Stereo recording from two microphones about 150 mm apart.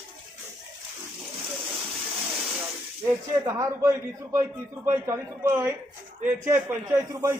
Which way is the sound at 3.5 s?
20° right (ahead or behind).